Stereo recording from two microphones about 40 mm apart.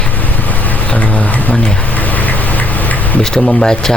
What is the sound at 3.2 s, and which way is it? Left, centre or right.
Speech, centre.